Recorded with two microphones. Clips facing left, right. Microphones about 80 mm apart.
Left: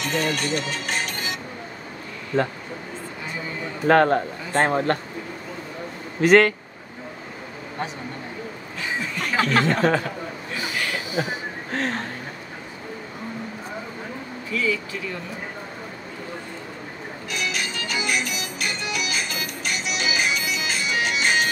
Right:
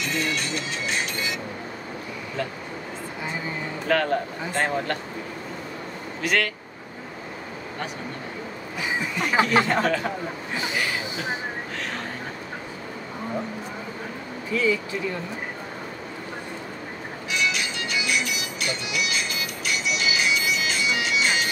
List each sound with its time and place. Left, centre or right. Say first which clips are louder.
0.0 s speech: left 3 dB; left
2.3 s speech: left 8 dB; left
3.8 s speech: left 6 dB; left
6.2 s speech: left 10 dB; left
8.8 s speech: right 1 dB; centre
10.5 s a sound: right 1 dB; right
11.7 s a sound: left 6 dB; left
14.5 s speech: right 2 dB; right
17.3 s music: right 2 dB; left
20.6 s bagpipes: left 1 dB; left